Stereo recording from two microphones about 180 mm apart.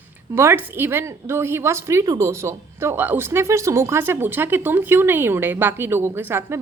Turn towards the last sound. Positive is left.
turn(degrees=-15)  # may be behind; listen again after turning